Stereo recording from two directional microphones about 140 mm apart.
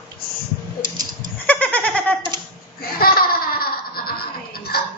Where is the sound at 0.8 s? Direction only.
30° right (ahead or behind).